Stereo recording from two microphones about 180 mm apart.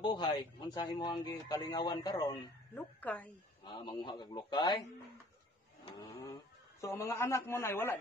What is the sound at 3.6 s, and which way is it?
A man's voice, 25° left (ahead or behind).